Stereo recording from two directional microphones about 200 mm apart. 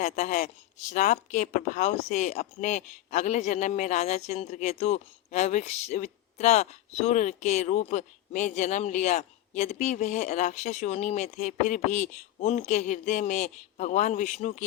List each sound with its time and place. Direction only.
0.0 s speech: 40° left (ahead or behind)